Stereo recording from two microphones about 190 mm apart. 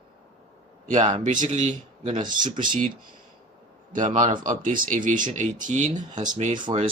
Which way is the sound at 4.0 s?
30° right (ahead or behind).